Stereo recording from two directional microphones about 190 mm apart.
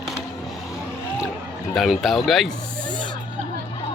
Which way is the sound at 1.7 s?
Centre (ahead or behind).